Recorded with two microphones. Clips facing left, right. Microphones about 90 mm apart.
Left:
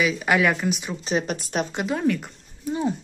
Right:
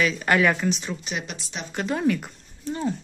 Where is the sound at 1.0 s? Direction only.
40° left (ahead or behind).